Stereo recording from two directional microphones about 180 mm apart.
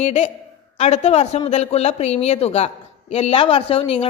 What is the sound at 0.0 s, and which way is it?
A man's voice, 35° left (ahead or behind).